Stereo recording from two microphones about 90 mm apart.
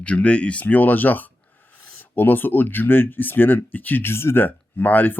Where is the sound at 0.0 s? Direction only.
15° left (ahead or behind).